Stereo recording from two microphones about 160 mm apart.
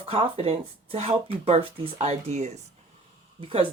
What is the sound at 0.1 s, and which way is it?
Speech, 35° right (ahead or behind).